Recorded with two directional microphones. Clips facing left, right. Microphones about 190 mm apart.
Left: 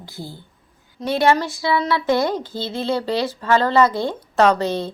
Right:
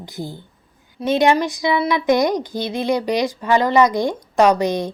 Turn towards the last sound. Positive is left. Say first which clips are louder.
# right 2 dB
turn(degrees=-15)  # may be behind; listen again after turning